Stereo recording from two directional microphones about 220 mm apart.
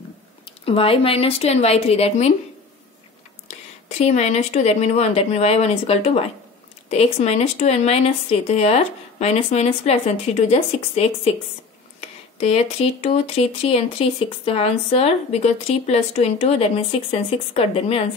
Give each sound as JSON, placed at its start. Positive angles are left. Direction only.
{"t": 0.7, "sound": "speech", "side_deg": 25}
{"t": 4.0, "sound": "speech", "side_deg": 30}
{"t": 12.4, "sound": "speech", "side_deg": 25}